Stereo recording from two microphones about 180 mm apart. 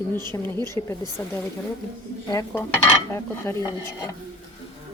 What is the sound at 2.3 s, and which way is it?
Speech, 20° left (ahead or behind).